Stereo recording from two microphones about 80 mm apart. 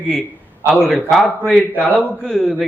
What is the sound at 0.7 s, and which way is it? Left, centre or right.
Speech, centre.